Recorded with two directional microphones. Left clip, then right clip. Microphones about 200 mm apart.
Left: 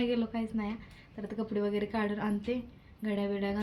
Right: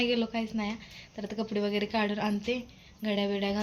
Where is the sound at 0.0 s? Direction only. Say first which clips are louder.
Right 3 dB; centre (ahead or behind).